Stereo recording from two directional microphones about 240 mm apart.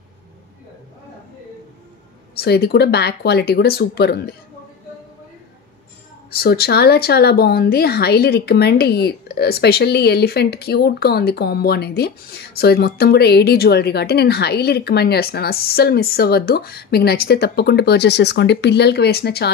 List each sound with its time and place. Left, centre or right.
2.3 s speech: left
6.3 s speech: left